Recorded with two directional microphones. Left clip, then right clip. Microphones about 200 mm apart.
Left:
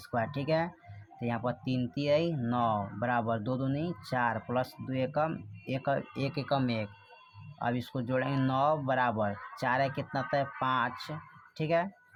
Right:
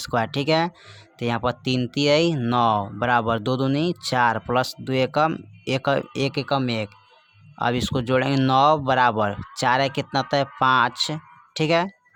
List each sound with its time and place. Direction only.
0.0 s speech: 45° right (ahead or behind)